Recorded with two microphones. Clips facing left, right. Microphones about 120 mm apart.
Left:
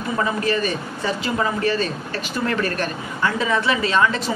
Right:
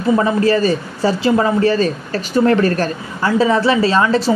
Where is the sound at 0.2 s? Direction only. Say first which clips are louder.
Right 7 dB; 35° right (ahead or behind).